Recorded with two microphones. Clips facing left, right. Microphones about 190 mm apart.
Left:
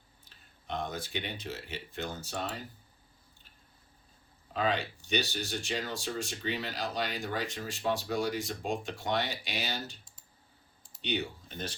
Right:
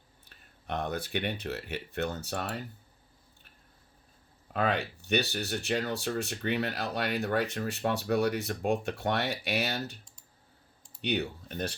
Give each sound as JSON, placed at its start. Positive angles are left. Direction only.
{"t": 0.3, "sound": "speech", "side_deg": -65}
{"t": 4.5, "sound": "speech", "side_deg": -60}
{"t": 11.0, "sound": "speech", "side_deg": -60}